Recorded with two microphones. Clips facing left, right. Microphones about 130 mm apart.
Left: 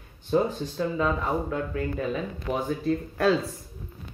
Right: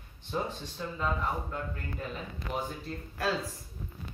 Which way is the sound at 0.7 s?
70° left (ahead or behind).